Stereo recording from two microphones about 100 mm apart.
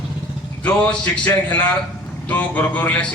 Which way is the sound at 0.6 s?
10° left (ahead or behind).